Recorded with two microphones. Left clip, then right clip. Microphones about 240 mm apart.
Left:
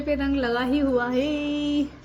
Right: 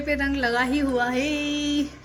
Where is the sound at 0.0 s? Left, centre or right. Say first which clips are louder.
Right 1 dB; centre.